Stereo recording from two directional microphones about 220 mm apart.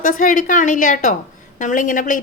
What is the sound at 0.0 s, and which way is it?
Speech, 35° left (ahead or behind).